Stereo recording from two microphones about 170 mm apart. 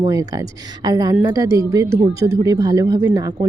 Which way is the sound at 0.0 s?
25° right (ahead or behind).